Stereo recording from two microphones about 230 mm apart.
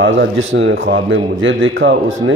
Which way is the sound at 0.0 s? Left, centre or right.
Right.